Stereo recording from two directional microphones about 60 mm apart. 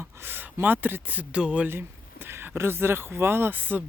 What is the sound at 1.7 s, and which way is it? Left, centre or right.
Speech, right.